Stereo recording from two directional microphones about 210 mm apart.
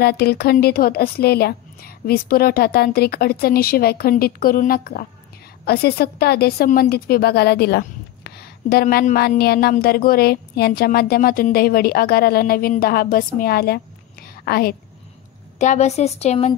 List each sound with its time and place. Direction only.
0.0 s a woman's voice: 50° left (ahead or behind)
14.2 s a sound: 45° left (ahead or behind)
15.6 s speech: 35° left (ahead or behind)